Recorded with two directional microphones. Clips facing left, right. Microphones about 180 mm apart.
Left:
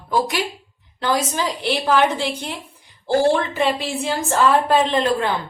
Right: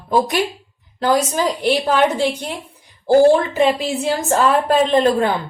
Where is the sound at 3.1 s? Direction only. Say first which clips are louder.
Right 6 dB; 40° right (ahead or behind).